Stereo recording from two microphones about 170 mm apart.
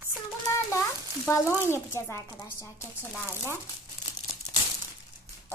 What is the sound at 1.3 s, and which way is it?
Speech, 15° left (ahead or behind).